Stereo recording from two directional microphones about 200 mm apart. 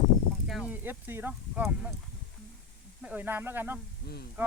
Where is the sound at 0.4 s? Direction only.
5° right (ahead or behind).